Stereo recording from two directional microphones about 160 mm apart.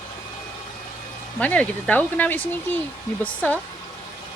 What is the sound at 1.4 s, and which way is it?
Speech, 10° left (ahead or behind).